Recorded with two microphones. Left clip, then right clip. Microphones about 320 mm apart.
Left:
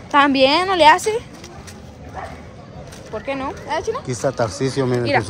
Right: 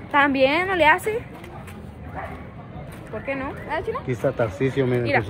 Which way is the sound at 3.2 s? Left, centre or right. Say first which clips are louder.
Left 3 dB; left.